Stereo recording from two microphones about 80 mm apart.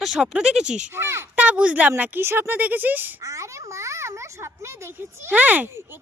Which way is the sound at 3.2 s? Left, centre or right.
Right.